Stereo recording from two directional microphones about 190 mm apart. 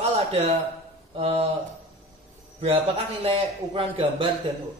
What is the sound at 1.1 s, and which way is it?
Speech, 35° right (ahead or behind).